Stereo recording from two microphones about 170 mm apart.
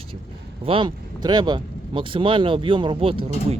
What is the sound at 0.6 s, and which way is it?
Speech, 30° right (ahead or behind).